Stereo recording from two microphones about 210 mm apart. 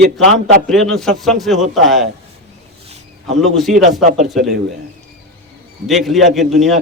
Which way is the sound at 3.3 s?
Centre (ahead or behind).